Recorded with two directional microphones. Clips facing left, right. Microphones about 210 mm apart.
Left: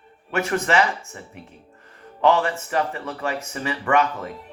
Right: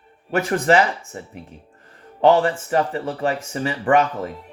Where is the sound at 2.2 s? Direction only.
35° right (ahead or behind).